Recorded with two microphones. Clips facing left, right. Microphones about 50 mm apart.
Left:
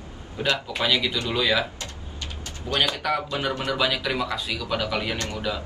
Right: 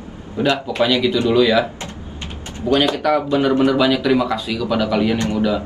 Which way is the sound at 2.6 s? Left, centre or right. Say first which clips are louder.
Right 9 dB; right.